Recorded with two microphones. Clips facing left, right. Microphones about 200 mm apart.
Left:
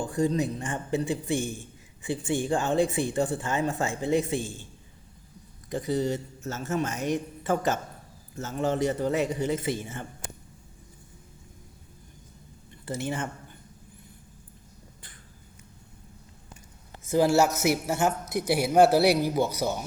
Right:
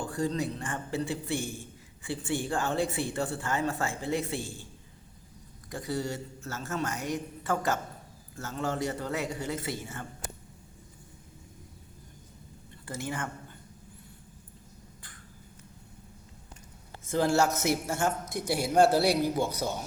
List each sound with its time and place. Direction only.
0.0 s speech: 20° left (ahead or behind)
5.7 s a man's voice: 20° left (ahead or behind)
12.8 s speech: 20° left (ahead or behind)
17.1 s speech: 10° left (ahead or behind)